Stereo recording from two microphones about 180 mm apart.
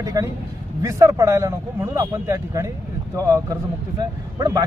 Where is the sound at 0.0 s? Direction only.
20° right (ahead or behind).